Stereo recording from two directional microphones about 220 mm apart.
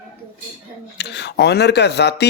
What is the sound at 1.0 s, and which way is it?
A man's voice, 50° left (ahead or behind).